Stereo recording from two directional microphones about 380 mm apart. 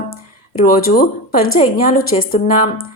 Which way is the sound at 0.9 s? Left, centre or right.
Left.